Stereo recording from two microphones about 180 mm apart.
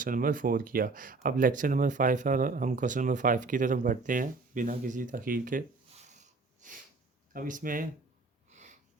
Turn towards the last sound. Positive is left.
turn(degrees=-50)  # may be behind; listen again after turning